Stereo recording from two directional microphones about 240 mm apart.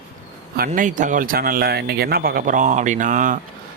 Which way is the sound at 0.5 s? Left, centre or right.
Right.